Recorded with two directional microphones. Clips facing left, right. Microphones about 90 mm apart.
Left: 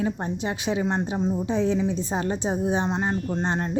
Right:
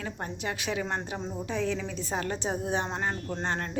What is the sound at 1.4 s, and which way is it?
A woman's voice, 20° left (ahead or behind).